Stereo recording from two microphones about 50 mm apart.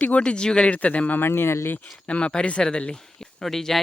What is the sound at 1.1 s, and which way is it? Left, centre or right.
Speech, left.